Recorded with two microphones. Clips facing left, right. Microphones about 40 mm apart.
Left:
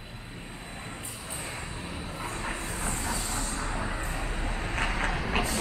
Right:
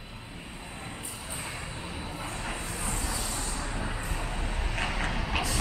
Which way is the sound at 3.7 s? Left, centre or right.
Centre.